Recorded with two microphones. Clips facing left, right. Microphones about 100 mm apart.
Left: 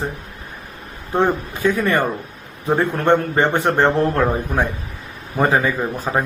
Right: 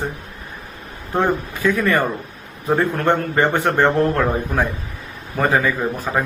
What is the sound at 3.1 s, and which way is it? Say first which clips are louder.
A man's voice: left 3 dB; 20° left (ahead or behind).